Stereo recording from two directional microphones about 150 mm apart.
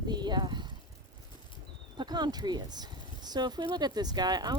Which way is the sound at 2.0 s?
30° right (ahead or behind).